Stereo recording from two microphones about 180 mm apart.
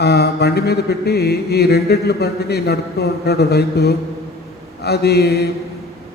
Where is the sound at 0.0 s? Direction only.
65° left (ahead or behind).